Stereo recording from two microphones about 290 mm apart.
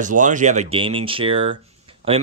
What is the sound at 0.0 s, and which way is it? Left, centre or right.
Speech, right.